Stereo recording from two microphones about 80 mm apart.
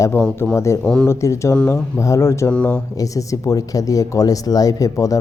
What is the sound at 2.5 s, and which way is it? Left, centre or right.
Speech, centre.